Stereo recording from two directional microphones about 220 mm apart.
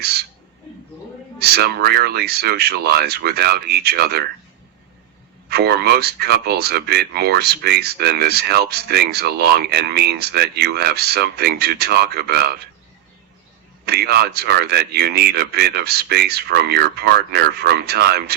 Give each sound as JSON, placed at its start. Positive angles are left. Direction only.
{"t": 1.4, "sound": "speech", "side_deg": -45}
{"t": 5.5, "sound": "speech", "side_deg": -45}
{"t": 13.8, "sound": "speech", "side_deg": -45}